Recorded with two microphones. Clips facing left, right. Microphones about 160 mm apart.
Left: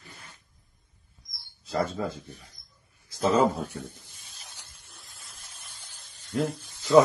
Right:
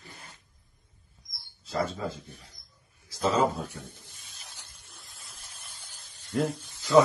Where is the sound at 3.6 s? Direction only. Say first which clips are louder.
Left 5 dB; centre (ahead or behind).